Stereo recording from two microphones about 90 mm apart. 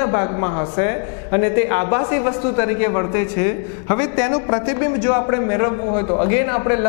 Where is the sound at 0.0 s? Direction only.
20° left (ahead or behind).